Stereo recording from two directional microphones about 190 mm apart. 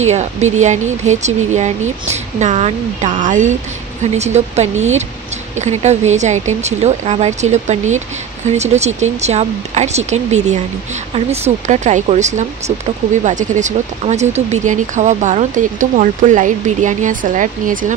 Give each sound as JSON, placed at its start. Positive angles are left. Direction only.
{"t": 0.0, "sound": "speech", "side_deg": -35}